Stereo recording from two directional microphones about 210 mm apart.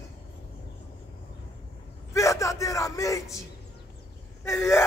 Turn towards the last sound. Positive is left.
turn(degrees=15)  # may be behind; listen again after turning